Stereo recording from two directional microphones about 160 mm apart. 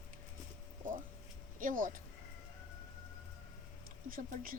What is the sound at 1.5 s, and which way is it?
Speech, 55° right (ahead or behind).